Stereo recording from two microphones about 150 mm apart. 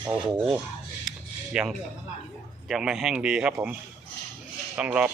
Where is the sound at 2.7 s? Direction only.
5° right (ahead or behind).